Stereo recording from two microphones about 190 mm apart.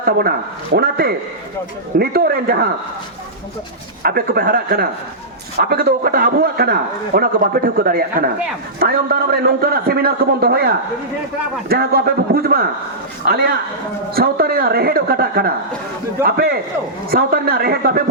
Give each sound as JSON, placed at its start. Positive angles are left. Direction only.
{"t": 0.0, "sound": "a man's voice", "side_deg": -55}
{"t": 4.0, "sound": "a man's voice", "side_deg": -50}